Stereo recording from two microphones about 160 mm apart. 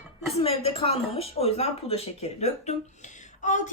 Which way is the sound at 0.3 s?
40° left (ahead or behind).